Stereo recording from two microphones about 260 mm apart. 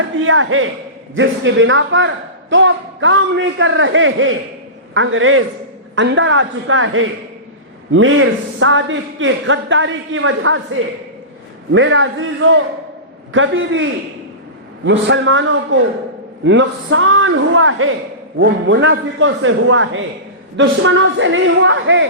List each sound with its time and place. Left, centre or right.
0.3 s a man's voice: right
11.7 s a man's voice: right
14.8 s a man's voice: right